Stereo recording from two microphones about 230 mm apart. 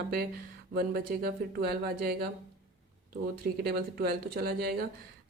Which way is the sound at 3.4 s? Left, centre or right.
Right.